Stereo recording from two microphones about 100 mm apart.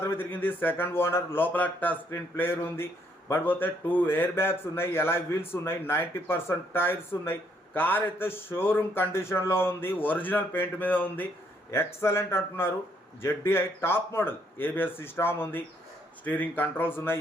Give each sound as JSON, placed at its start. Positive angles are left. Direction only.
{"t": 0.0, "sound": "speech", "side_deg": 25}